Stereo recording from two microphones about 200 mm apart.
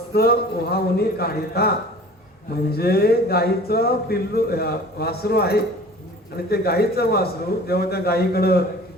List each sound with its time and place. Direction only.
0.1 s speech: 50° left (ahead or behind)
2.7 s speech: 50° left (ahead or behind)